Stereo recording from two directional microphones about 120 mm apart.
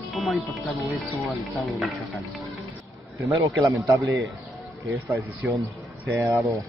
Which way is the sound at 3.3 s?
25° right (ahead or behind).